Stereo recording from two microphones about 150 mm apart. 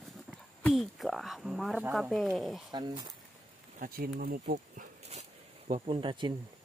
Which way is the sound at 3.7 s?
70° right (ahead or behind).